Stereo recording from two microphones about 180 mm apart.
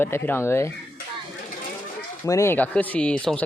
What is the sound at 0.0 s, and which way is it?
Speech, 10° left (ahead or behind).